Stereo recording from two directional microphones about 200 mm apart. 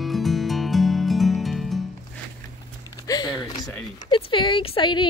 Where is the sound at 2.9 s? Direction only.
20° left (ahead or behind).